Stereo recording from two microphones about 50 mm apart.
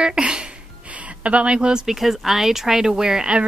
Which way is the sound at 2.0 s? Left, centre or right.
Centre.